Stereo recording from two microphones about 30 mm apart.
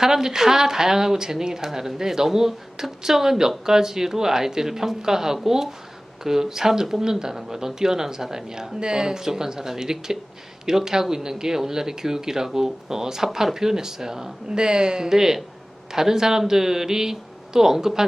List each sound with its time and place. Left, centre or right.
0.0 s a woman's voice: centre